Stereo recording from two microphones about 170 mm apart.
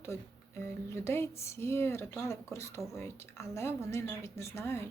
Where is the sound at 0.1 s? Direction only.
15° left (ahead or behind).